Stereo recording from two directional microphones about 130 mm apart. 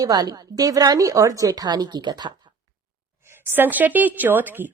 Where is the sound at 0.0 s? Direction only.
30° right (ahead or behind).